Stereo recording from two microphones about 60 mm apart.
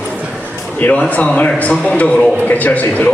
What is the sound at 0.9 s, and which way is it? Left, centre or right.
A man's voice, left.